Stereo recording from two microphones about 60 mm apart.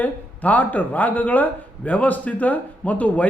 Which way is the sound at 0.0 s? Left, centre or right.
Left.